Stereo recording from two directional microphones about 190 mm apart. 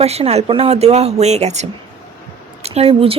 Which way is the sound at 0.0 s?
35° right (ahead or behind).